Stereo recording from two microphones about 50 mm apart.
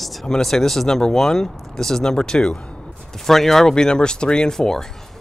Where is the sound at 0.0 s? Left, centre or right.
Centre.